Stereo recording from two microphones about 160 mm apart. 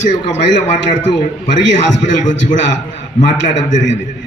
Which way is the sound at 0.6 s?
45° left (ahead or behind).